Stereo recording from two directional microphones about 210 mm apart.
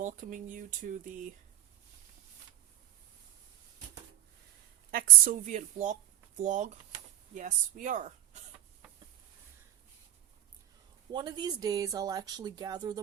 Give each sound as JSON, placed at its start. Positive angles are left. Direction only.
{"t": 0.0, "sound": "a woman's voice", "side_deg": -35}
{"t": 4.9, "sound": "a woman's voice", "side_deg": -45}
{"t": 11.1, "sound": "speech", "side_deg": -20}